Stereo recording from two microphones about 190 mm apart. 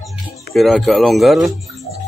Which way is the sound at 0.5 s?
Centre (ahead or behind).